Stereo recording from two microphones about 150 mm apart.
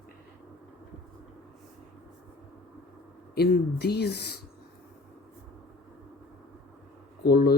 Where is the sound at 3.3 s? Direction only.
90° left.